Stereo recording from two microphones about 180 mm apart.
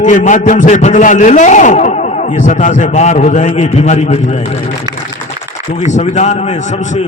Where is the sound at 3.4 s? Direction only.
40° left (ahead or behind).